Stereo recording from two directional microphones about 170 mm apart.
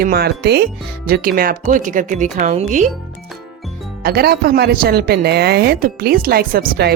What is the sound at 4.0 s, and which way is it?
Speech, 65° right (ahead or behind).